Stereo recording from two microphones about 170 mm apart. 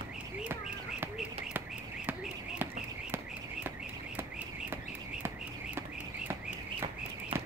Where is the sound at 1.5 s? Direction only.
10° right (ahead or behind).